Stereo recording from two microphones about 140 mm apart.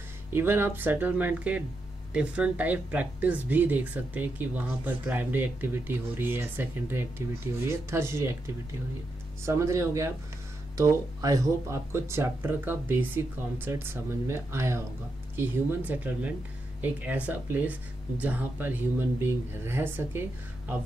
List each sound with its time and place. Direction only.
0.3 s speech: 15° right (ahead or behind)
9.4 s speech: 20° right (ahead or behind)